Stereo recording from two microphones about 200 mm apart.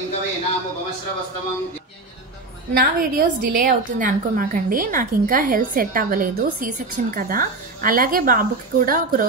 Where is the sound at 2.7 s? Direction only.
45° right (ahead or behind).